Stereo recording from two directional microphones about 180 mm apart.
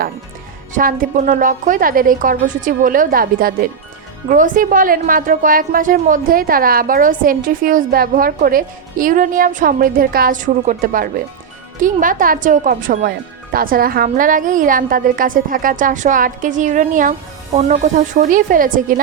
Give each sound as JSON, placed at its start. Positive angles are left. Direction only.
{"t": 0.7, "sound": "a woman's voice", "side_deg": -50}